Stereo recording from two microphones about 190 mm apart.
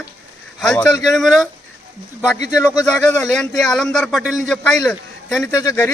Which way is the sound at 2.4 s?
20° left (ahead or behind).